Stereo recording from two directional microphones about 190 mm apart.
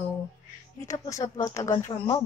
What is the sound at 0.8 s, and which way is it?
Speech, 15° left (ahead or behind).